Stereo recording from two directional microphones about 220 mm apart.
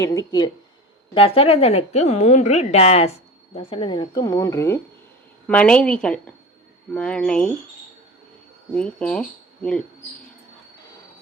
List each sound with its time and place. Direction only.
0.0 s a woman's voice: 15° left (ahead or behind)
8.7 s a woman's voice: 5° left (ahead or behind)